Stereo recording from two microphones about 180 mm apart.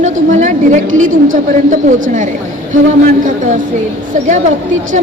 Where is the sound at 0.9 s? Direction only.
90° right.